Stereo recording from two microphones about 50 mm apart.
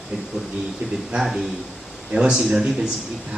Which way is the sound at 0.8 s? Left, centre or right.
Centre.